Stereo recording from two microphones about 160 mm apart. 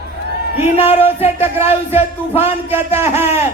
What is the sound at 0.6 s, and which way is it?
Music, 40° left (ahead or behind).